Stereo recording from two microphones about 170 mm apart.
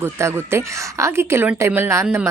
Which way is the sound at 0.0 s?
15° right (ahead or behind).